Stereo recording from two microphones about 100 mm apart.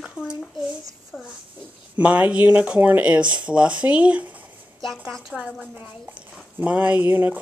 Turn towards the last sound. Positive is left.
turn(degrees=-20)  # may be behind; listen again after turning